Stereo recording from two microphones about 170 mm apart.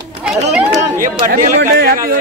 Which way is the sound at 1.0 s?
50° right (ahead or behind).